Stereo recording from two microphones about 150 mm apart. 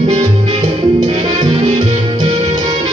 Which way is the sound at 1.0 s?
45° right (ahead or behind).